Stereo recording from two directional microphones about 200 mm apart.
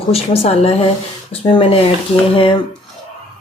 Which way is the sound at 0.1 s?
30° left (ahead or behind).